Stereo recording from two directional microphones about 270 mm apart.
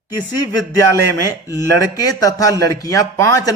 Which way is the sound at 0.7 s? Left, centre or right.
Centre.